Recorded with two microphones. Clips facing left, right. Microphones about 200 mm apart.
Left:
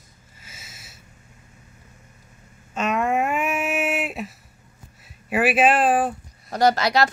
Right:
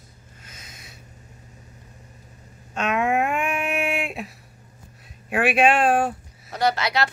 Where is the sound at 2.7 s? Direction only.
Centre (ahead or behind).